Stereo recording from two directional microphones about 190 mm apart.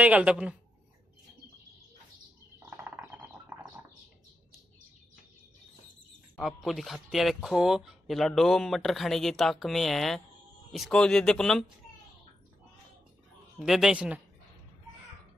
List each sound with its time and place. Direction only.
0.0 s speech: 5° right (ahead or behind)
2.8 s bird: 10° right (ahead or behind)
6.3 s speech: centre (ahead or behind)
13.6 s speech: centre (ahead or behind)